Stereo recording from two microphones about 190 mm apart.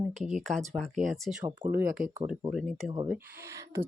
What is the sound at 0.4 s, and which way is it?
Speech, centre (ahead or behind).